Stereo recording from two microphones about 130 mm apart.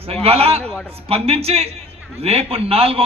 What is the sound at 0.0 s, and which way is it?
Speech, 50° right (ahead or behind).